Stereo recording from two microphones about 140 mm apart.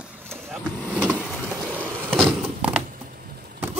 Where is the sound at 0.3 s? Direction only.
5° left (ahead or behind).